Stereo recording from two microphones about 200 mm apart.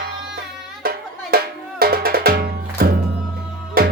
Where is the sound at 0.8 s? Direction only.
50° right (ahead or behind).